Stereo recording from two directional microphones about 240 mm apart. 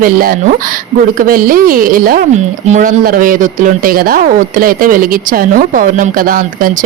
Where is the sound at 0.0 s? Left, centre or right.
Right.